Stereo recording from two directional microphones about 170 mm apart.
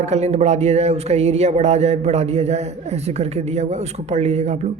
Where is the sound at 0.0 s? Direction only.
40° right (ahead or behind).